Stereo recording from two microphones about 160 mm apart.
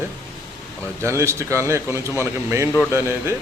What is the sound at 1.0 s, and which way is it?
A man's voice, 15° right (ahead or behind).